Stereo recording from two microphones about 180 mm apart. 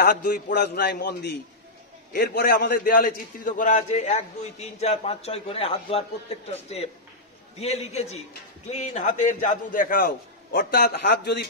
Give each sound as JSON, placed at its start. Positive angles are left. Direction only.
{"t": 0.0, "sound": "a man's voice", "side_deg": 55}